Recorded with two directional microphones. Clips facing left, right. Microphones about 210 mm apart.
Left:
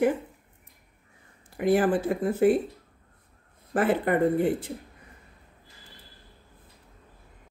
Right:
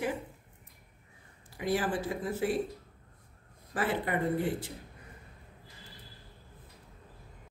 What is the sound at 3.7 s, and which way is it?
Speech, 55° left (ahead or behind).